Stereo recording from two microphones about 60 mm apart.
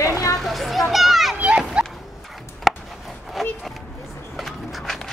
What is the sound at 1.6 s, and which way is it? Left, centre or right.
Dog, centre.